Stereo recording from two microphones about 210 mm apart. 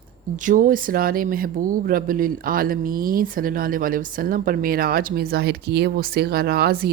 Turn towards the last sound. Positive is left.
turn(degrees=-50)  # may be behind; listen again after turning